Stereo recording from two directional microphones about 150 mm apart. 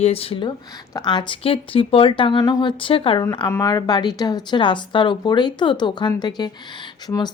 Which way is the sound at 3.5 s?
25° left (ahead or behind).